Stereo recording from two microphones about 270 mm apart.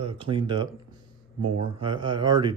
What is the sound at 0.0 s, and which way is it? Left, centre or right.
Speech, right.